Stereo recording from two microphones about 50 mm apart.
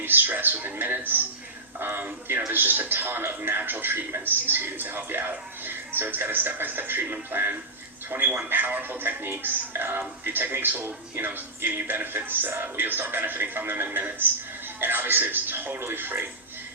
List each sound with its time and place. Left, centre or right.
0.0 s a man's voice: right